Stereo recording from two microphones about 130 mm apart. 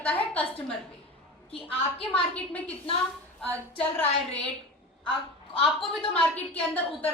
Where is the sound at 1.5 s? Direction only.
45° left (ahead or behind).